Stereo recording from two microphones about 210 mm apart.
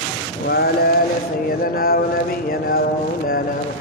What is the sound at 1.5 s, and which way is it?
Mantra, 45° left (ahead or behind).